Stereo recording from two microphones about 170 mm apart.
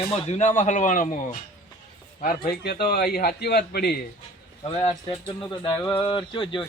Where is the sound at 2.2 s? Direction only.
65° left (ahead or behind).